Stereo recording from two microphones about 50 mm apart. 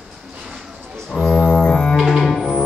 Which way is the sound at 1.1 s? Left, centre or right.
Centre.